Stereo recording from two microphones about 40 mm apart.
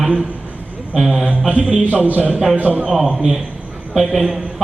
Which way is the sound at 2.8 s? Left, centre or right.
Centre.